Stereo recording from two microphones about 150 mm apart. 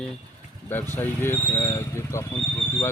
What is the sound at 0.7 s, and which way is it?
Speech, 15° left (ahead or behind).